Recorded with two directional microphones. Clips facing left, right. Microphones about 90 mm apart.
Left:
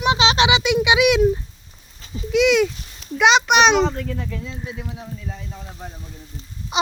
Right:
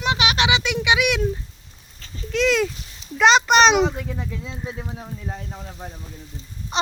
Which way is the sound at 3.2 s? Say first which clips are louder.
Even; 5° left (ahead or behind).